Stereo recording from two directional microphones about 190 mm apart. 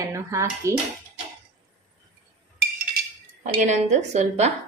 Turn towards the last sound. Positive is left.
turn(degrees=-35)  # may be behind; listen again after turning